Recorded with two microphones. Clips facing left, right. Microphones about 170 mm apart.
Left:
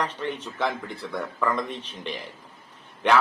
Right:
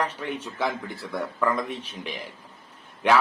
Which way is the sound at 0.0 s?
10° right (ahead or behind).